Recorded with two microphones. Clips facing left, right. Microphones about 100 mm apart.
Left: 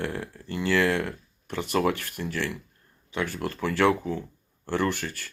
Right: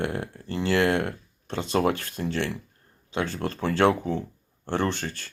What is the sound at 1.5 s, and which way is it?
Speech, 25° right (ahead or behind).